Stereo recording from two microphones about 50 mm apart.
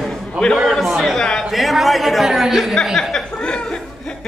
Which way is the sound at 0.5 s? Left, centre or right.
Centre.